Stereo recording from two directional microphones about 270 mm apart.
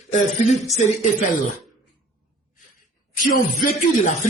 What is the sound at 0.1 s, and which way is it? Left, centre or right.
Speech, left.